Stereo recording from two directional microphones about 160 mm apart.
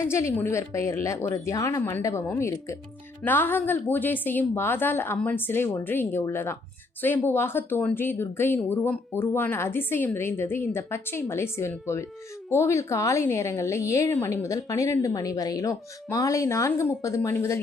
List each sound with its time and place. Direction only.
0.0 s a woman's voice: 15° left (ahead or behind)